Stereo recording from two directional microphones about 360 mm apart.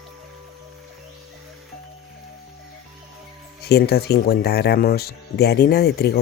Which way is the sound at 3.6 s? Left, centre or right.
Left.